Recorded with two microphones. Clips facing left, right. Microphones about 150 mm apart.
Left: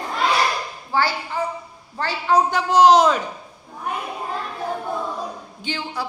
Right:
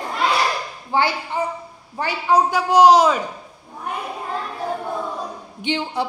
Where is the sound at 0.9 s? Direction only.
20° right (ahead or behind).